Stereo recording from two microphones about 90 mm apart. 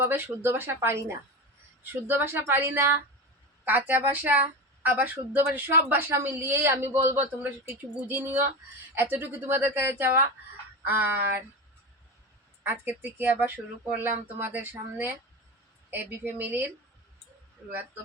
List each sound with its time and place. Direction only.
0.0 s a woman's voice: 25° right (ahead or behind)
13.0 s a woman's voice: 20° right (ahead or behind)